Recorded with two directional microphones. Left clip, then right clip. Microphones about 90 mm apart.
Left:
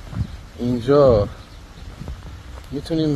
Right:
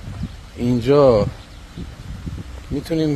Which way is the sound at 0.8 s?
35° right (ahead or behind).